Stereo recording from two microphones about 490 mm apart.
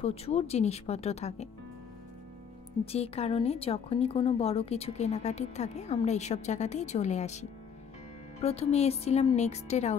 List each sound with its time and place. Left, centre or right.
0.0 s speech: centre
2.8 s speech: centre